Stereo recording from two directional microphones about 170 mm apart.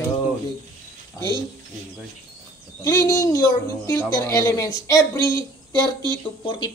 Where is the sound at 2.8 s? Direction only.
20° left (ahead or behind).